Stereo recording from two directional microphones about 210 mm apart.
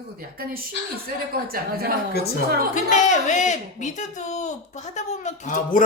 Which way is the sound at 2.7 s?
35° left (ahead or behind).